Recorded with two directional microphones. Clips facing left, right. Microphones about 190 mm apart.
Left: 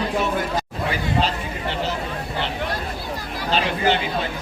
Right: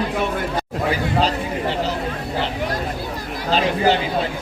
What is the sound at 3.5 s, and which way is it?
Chatter, 35° right (ahead or behind).